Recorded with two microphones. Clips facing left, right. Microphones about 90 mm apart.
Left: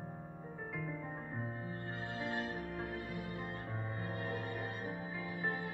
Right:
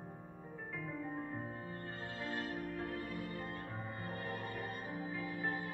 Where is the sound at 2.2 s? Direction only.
20° left (ahead or behind).